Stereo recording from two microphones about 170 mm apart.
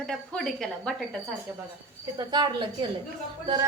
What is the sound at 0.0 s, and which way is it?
A woman's voice, 5° left (ahead or behind).